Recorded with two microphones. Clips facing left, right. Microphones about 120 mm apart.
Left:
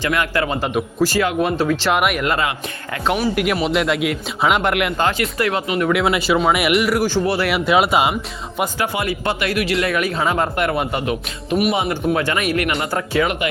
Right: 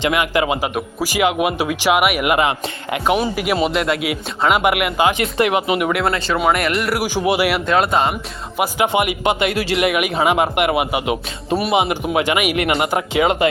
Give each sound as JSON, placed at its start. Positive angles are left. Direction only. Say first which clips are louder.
{"t": 0.0, "sound": "speech", "louder": "right 2 dB", "side_deg": -15}
{"t": 5.1, "sound": "speech", "louder": "right 3 dB", "side_deg": -20}
{"t": 6.1, "sound": "speech", "louder": "left 1 dB", "side_deg": 10}
{"t": 7.0, "sound": "speech", "louder": "right 1 dB", "side_deg": -15}
{"t": 7.5, "sound": "speech", "louder": "left 1 dB", "side_deg": 5}
{"t": 8.8, "sound": "speech", "louder": "right 7 dB", "side_deg": -20}
{"t": 9.9, "sound": "speech", "louder": "right 2 dB", "side_deg": -15}
{"t": 12.5, "sound": "speech", "louder": "right 3 dB", "side_deg": -25}